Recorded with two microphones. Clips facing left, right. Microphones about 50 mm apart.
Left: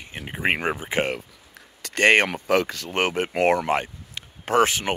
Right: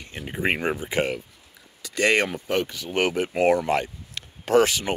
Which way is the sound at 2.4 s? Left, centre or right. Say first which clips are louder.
Left 4 dB; left.